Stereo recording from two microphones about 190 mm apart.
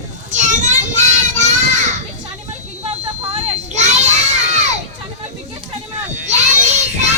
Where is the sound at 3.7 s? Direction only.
40° right (ahead or behind).